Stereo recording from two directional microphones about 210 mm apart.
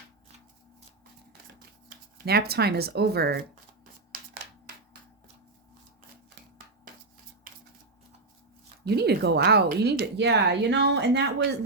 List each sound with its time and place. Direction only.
2.1 s speech: 50° right (ahead or behind)
8.8 s speech: 50° right (ahead or behind)